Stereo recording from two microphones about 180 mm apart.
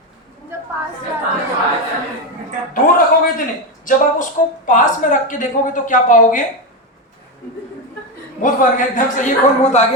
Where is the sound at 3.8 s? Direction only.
45° left (ahead or behind).